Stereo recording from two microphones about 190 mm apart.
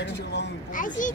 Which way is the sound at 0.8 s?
45° left (ahead or behind).